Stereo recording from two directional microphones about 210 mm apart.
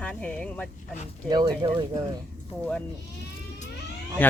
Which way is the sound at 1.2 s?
20° right (ahead or behind).